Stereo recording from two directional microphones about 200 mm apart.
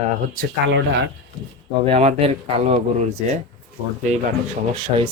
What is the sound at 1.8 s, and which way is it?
Speech, 30° right (ahead or behind).